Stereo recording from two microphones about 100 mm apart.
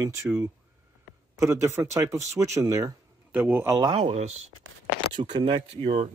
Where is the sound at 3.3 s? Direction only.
15° right (ahead or behind).